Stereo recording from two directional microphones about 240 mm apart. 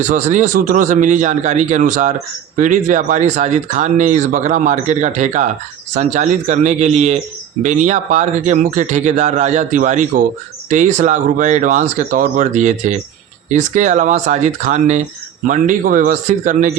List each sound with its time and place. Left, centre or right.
0.0 s speech: right